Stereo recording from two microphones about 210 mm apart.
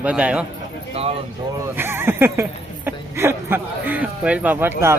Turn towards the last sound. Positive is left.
turn(degrees=-10)  # may be behind; listen again after turning